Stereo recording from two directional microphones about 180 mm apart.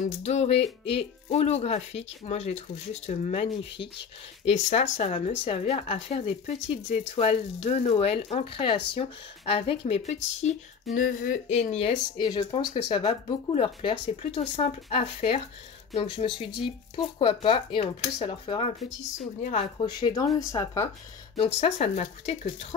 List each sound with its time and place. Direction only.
0.0 s speech: 40° left (ahead or behind)
10.9 s speech: 50° left (ahead or behind); by 20.9 s 15° left (ahead or behind)
21.5 s speech: 40° left (ahead or behind)